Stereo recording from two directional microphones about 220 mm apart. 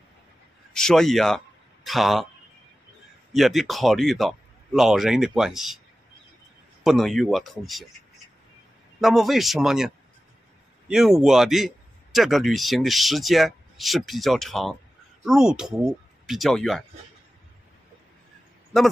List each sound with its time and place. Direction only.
0.7 s a man's voice: centre (ahead or behind)
3.3 s a man's voice: centre (ahead or behind)
6.8 s a man's voice: centre (ahead or behind)
9.0 s a man's voice: centre (ahead or behind)